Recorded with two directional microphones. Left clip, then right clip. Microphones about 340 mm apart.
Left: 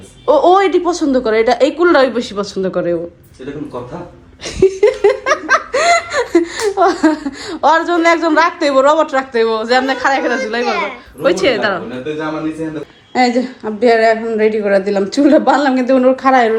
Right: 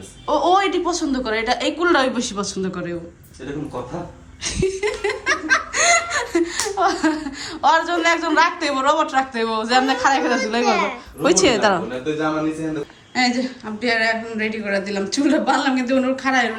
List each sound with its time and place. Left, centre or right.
0.3 s a woman's voice: centre
4.6 s laughter: centre; by 11.3 s right
11.4 s a woman's voice: centre
13.1 s a woman's voice: centre
16.1 s speech: right